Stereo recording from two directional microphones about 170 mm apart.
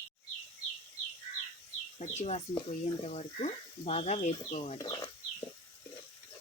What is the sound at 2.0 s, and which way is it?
Speech, 40° left (ahead or behind).